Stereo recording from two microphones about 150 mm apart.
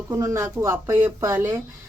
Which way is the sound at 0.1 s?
20° right (ahead or behind).